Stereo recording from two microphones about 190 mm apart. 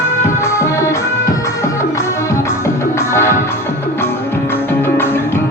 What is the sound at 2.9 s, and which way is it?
Music, 15° left (ahead or behind).